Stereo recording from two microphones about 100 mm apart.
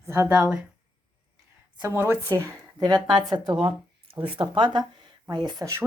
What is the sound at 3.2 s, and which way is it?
A woman's voice, 55° right (ahead or behind).